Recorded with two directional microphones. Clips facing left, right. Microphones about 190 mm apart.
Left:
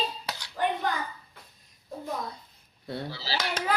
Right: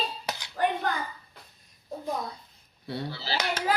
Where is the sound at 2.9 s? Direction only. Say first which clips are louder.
Right 1 dB; 55° right (ahead or behind).